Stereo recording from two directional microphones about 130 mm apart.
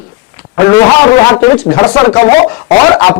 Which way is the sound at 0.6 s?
20° left (ahead or behind).